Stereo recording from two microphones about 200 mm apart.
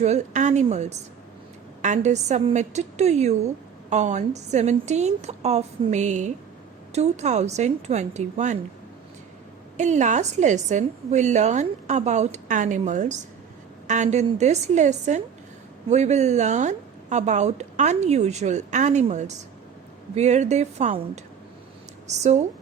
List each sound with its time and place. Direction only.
0.0 s a woman's voice: 35° right (ahead or behind)
9.7 s a woman's voice: 35° right (ahead or behind)
22.0 s speech: 35° right (ahead or behind)